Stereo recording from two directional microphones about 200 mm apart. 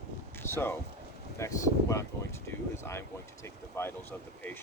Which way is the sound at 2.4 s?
15° left (ahead or behind).